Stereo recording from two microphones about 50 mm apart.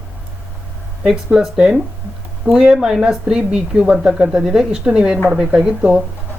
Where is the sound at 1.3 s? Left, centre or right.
Centre.